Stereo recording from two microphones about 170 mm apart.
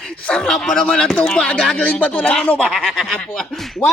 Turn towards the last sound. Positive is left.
turn(degrees=5)  # may be behind; listen again after turning